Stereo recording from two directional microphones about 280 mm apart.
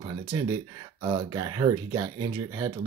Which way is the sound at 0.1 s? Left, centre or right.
Centre.